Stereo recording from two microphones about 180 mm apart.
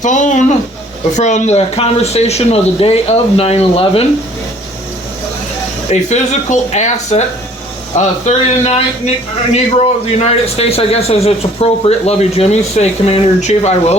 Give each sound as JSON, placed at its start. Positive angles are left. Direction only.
{"t": 0.0, "sound": "a man's voice", "side_deg": 45}
{"t": 5.9, "sound": "a man's voice", "side_deg": 40}